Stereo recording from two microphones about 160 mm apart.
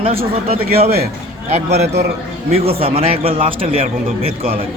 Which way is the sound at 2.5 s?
40° right (ahead or behind).